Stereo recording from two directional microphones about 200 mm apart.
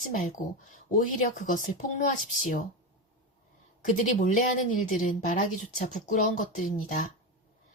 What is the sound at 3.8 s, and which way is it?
Speech, 40° left (ahead or behind).